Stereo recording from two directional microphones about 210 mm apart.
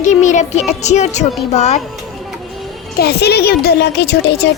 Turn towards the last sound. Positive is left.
turn(degrees=50)  # may be behind; listen again after turning